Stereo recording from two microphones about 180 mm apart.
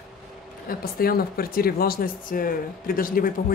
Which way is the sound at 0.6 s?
55° left (ahead or behind).